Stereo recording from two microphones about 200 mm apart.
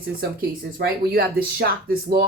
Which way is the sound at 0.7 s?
50° right (ahead or behind).